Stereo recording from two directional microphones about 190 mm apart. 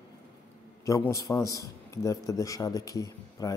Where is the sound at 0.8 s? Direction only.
15° left (ahead or behind).